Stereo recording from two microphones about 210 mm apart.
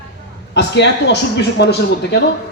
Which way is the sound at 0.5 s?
55° left (ahead or behind).